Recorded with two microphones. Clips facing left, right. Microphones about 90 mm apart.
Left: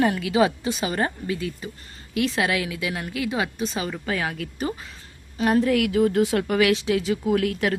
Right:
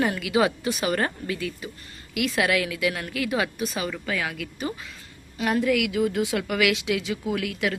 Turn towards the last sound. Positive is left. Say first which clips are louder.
# left 4 dB
turn(degrees=40)  # may be behind; listen again after turning